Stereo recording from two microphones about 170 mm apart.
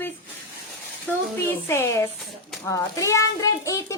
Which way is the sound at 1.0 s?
15° left (ahead or behind).